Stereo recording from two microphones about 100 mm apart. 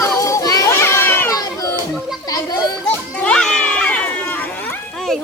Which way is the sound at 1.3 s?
35° left (ahead or behind).